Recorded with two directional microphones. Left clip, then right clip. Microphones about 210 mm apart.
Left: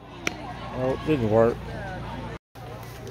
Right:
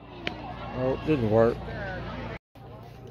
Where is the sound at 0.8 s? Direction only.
Centre (ahead or behind).